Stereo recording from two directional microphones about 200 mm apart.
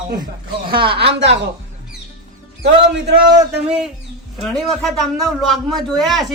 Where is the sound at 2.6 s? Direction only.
55° right (ahead or behind).